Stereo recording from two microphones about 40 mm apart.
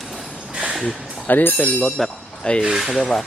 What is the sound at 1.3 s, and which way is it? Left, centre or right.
Speech, left.